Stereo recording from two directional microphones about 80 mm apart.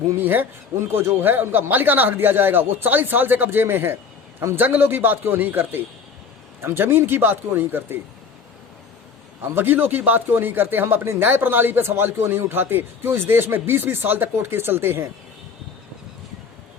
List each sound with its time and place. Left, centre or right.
0.2 s speech: right
9.4 s speech: right